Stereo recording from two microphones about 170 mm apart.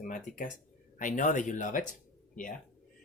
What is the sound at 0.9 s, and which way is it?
Speech, 50° left (ahead or behind).